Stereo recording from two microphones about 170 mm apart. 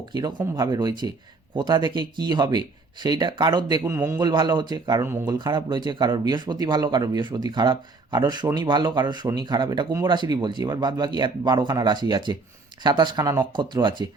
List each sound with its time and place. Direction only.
0.1 s speech: 25° right (ahead or behind)